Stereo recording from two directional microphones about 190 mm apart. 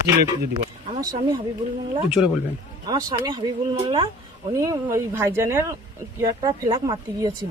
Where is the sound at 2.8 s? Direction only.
20° right (ahead or behind).